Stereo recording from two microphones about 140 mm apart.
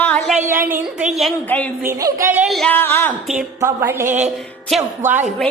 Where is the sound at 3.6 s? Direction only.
20° right (ahead or behind).